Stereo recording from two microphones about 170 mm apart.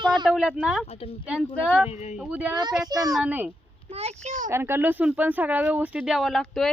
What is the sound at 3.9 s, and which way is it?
Speech, 40° right (ahead or behind).